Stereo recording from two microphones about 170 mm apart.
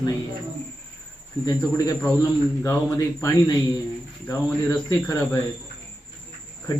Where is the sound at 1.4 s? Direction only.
20° left (ahead or behind).